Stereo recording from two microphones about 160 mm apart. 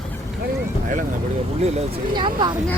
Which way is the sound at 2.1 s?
30° right (ahead or behind).